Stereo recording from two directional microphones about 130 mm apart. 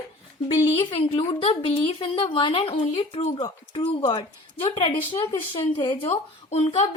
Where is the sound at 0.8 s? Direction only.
40° left (ahead or behind).